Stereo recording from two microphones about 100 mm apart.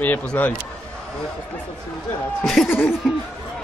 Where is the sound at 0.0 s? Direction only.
15° left (ahead or behind).